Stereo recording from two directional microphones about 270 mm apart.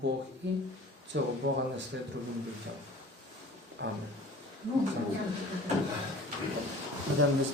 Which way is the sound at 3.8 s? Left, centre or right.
Right.